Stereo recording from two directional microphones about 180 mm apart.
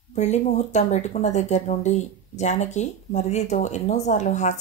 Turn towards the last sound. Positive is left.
turn(degrees=40)  # may be behind; listen again after turning